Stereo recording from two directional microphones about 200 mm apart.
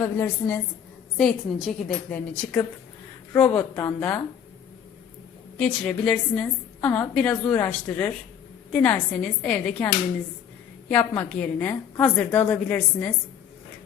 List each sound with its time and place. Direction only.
0.0 s a woman's voice: 10° left (ahead or behind)
5.5 s a woman's voice: 5° left (ahead or behind)